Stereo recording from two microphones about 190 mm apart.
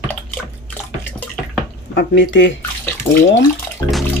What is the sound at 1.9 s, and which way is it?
Speech, 70° left (ahead or behind).